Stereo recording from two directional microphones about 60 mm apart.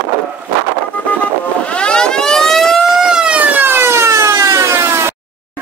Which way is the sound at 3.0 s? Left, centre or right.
Centre.